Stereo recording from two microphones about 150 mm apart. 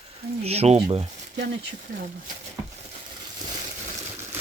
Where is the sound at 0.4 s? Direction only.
45° right (ahead or behind).